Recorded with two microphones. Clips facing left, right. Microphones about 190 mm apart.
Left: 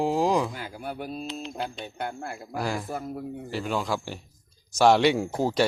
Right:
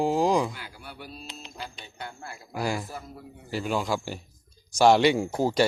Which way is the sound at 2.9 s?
50° left (ahead or behind).